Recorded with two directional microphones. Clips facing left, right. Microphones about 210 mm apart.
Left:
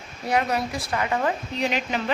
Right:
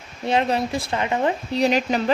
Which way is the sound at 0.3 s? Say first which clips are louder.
Right 3 dB; 25° right (ahead or behind).